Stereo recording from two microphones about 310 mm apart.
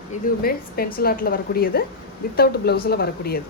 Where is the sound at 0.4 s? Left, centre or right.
Left.